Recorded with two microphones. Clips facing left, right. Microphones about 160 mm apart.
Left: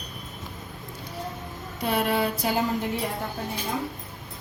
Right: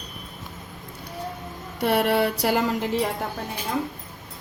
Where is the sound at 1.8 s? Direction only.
70° right (ahead or behind).